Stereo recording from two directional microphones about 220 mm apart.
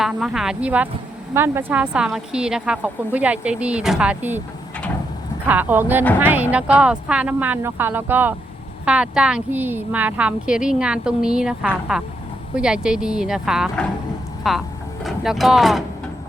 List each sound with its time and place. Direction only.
0.0 s a woman's voice: centre (ahead or behind)
5.5 s a woman's voice: 10° right (ahead or behind)